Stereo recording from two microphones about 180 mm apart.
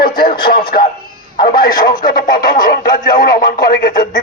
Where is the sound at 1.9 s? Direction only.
50° left (ahead or behind).